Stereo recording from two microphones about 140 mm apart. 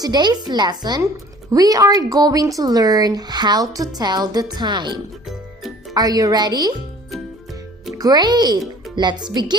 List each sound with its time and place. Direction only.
0.0 s a woman's voice: 30° right (ahead or behind)
5.9 s a woman's voice: 25° right (ahead or behind)
7.9 s a woman's voice: 30° right (ahead or behind)